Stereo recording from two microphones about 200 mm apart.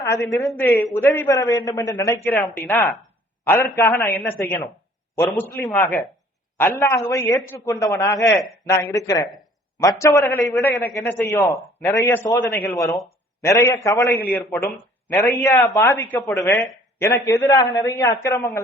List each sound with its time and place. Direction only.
0.4 s a man's voice: 10° left (ahead or behind)
12.4 s a man's voice: 50° left (ahead or behind)
13.4 s speech: 15° left (ahead or behind)